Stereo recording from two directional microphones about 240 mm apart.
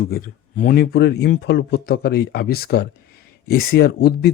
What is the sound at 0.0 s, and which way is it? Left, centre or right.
Speech, left.